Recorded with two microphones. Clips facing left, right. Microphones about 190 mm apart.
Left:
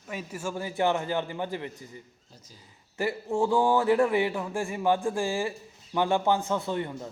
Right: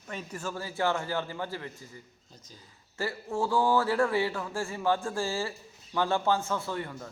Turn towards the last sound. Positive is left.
turn(degrees=20)  # may be behind; listen again after turning